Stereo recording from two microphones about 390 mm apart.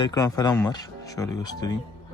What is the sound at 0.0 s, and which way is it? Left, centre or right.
Speech, centre.